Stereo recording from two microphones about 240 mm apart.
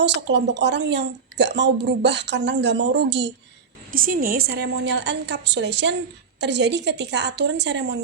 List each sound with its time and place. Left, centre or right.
0.0 s a woman's voice: right
3.9 s a woman's voice: right